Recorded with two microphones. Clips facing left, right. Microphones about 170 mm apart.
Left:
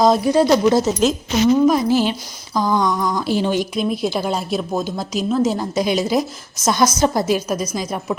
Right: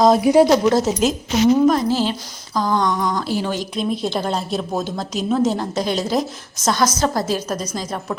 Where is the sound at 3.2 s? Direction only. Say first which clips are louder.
Left 4 dB; 20° left (ahead or behind).